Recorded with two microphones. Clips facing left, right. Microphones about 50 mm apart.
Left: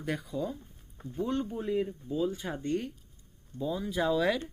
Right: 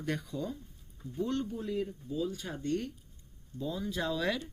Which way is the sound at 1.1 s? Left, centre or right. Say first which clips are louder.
Left 2 dB; centre.